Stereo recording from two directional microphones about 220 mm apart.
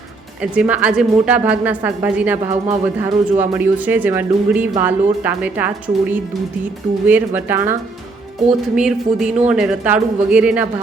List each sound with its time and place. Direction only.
0.5 s speech: 5° right (ahead or behind)